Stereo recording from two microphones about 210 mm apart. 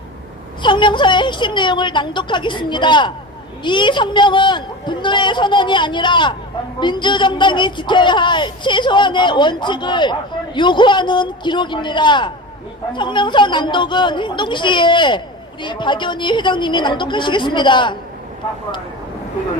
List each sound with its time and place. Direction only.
0.6 s a man's voice: 20° left (ahead or behind)